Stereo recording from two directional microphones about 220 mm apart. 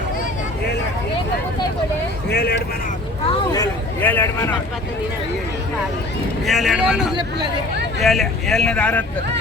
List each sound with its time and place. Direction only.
2.3 s speech: 45° left (ahead or behind)
3.2 s speech: 15° left (ahead or behind)
6.4 s speech: centre (ahead or behind)